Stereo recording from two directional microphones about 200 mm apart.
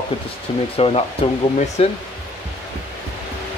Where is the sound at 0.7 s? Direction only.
30° left (ahead or behind).